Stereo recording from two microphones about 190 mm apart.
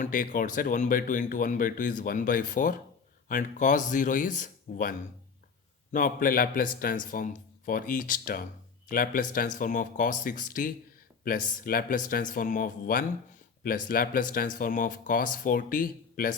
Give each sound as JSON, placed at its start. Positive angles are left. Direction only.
{"t": 0.0, "sound": "speech", "side_deg": 45}